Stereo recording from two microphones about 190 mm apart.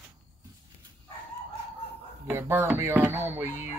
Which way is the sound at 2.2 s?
10° right (ahead or behind).